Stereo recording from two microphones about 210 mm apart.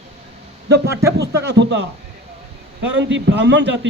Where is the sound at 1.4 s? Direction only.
60° right (ahead or behind).